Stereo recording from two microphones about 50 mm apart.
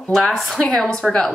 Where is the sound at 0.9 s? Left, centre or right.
Centre.